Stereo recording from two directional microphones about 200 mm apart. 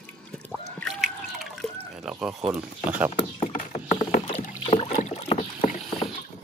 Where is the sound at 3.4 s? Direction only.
35° left (ahead or behind).